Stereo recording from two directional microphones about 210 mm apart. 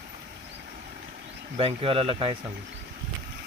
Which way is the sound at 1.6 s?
25° right (ahead or behind).